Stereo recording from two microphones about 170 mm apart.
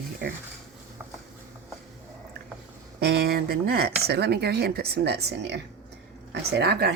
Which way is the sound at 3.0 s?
70° right (ahead or behind).